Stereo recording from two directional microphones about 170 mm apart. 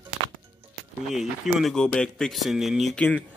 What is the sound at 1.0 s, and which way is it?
Speech, centre (ahead or behind).